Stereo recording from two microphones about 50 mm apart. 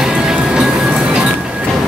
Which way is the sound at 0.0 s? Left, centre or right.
Centre.